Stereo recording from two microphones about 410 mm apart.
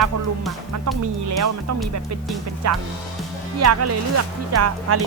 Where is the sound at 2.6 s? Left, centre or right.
Right.